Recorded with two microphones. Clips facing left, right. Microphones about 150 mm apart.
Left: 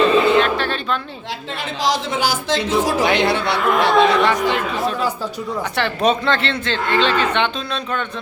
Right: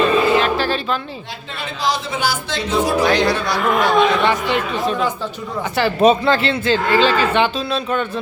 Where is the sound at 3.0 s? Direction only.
20° left (ahead or behind).